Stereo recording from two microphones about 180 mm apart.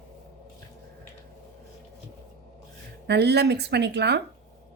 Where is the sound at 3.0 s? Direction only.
65° right (ahead or behind).